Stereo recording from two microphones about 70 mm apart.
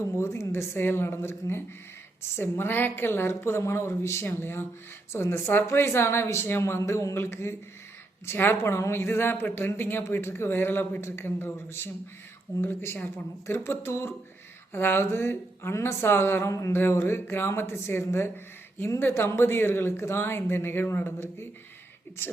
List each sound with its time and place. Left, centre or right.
0.0 s speech: left